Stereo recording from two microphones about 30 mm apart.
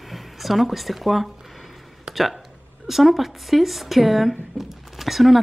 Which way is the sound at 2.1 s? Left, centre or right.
Right.